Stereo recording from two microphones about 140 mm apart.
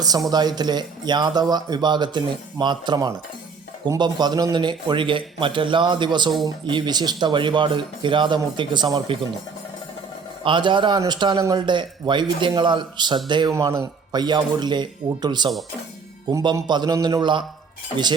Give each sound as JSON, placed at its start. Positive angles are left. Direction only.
{"t": 0.3, "sound": "a man's voice", "side_deg": -30}
{"t": 10.4, "sound": "a man's voice", "side_deg": -35}
{"t": 13.5, "sound": "a man's voice", "side_deg": -20}